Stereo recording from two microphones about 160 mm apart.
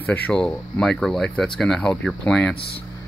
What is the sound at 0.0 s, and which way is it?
Speech, 10° left (ahead or behind).